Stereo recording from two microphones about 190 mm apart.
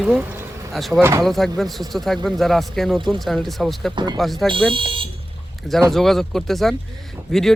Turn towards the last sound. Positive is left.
turn(degrees=0)  # may be behind; listen again after turning